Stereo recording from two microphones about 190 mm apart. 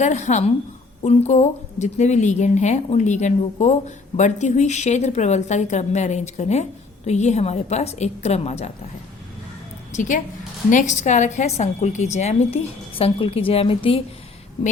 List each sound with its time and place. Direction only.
0.0 s a woman's voice: 40° left (ahead or behind)
9.9 s a woman's voice: 40° left (ahead or behind)